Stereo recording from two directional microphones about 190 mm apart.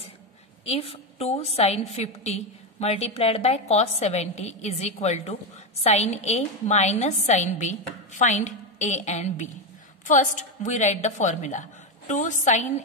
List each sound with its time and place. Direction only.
0.7 s a woman's voice: 30° left (ahead or behind)